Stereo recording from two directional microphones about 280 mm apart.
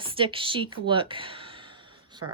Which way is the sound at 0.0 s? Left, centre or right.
Centre.